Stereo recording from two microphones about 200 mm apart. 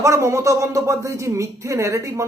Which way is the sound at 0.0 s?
15° right (ahead or behind).